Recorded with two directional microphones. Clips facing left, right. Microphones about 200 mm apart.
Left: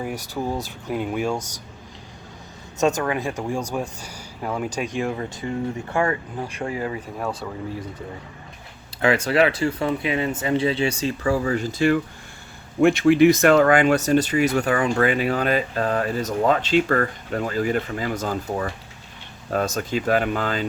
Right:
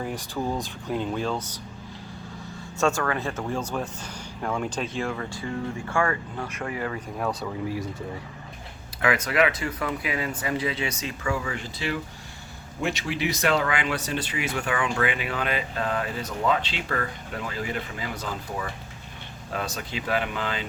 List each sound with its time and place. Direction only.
0.0 s speech: 10° left (ahead or behind)
2.8 s speech: 20° left (ahead or behind)
7.2 s speech: centre (ahead or behind)
9.0 s speech: 30° left (ahead or behind)